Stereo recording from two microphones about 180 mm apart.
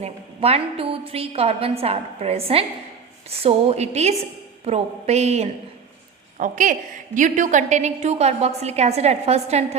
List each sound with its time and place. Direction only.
0.0 s a woman's voice: 35° right (ahead or behind)